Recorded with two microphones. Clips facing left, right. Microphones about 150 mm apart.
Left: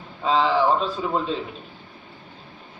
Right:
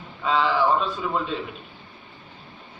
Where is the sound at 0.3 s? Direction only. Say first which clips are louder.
Left 2 dB; 30° left (ahead or behind).